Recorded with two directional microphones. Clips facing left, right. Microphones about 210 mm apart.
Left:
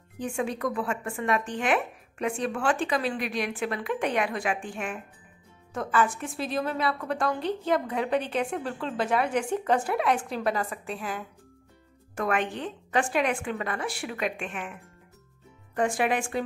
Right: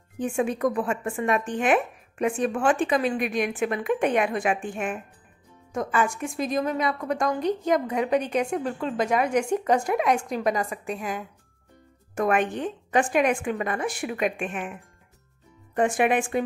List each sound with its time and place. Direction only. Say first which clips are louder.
0.4 s a woman's voice: right 5 dB; 20° right (ahead or behind)
5.8 s speech: right 1 dB; 15° right (ahead or behind)
15.7 s a woman's voice: right 4 dB; 20° right (ahead or behind)